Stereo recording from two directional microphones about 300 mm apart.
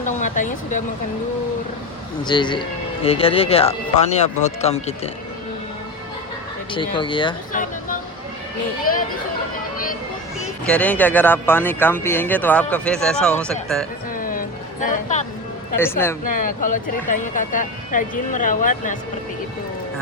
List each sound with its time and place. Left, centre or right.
0.0 s a sound: left
2.2 s speech: centre
6.7 s speech: centre
10.4 s speech: centre
14.2 s music: left
15.8 s speech: centre
16.2 s speech: left